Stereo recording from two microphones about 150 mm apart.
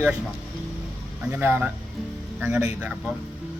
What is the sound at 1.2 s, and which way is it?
A man's voice, 10° right (ahead or behind).